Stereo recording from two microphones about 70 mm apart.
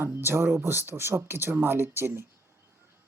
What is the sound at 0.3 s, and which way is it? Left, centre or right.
Speech, right.